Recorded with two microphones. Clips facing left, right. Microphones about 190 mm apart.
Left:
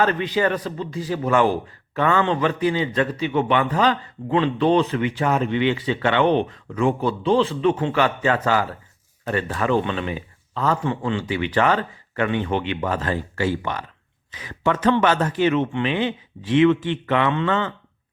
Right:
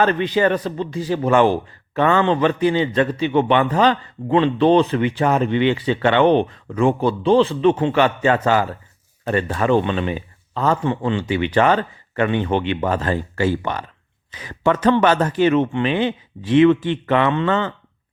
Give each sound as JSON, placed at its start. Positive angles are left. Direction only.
{"t": 0.3, "sound": "a man's voice", "side_deg": -30}